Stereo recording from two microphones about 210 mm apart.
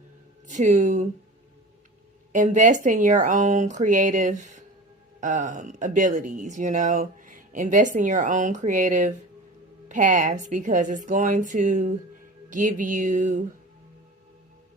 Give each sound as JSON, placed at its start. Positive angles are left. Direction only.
{"t": 0.4, "sound": "speech", "side_deg": -35}
{"t": 2.3, "sound": "speech", "side_deg": -35}